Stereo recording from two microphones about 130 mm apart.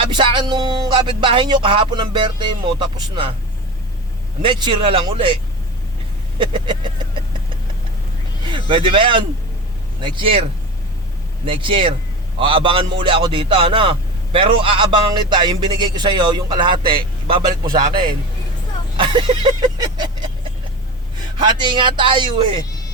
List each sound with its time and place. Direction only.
0.0 s a man's voice: 40° right (ahead or behind)
4.4 s a man's voice: 40° right (ahead or behind)
6.4 s a man's voice: 35° right (ahead or behind)
8.4 s speech: 40° right (ahead or behind)
11.4 s a man's voice: 40° right (ahead or behind)
18.9 s a man's voice: 35° right (ahead or behind)
21.4 s a man's voice: 35° right (ahead or behind)